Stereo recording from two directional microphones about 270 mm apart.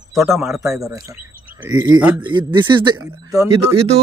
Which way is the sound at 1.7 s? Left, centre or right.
Centre.